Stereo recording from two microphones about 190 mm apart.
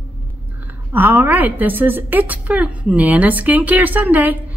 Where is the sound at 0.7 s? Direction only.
10° right (ahead or behind).